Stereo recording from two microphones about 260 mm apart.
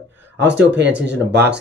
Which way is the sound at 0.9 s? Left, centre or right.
Centre.